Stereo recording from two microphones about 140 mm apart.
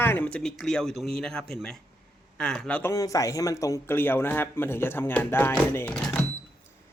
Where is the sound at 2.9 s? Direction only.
25° left (ahead or behind).